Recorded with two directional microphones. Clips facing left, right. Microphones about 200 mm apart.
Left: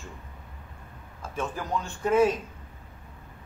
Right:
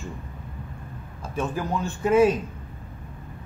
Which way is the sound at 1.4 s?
5° right (ahead or behind).